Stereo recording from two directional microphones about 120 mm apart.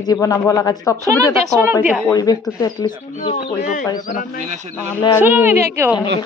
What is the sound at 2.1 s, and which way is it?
Speech, 30° left (ahead or behind).